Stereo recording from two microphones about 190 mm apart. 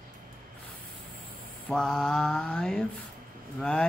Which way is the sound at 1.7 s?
5° left (ahead or behind).